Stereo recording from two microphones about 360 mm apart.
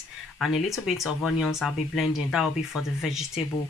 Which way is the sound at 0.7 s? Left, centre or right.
Centre.